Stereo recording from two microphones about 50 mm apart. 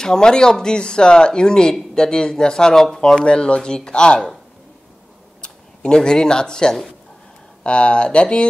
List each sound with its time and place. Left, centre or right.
0.0 s speech: centre
5.4 s speech: centre